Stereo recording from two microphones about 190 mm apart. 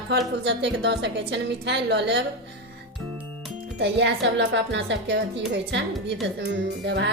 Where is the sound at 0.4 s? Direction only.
65° right (ahead or behind).